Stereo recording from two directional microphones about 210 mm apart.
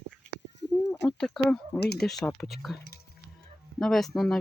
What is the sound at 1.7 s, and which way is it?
Speech, 50° left (ahead or behind).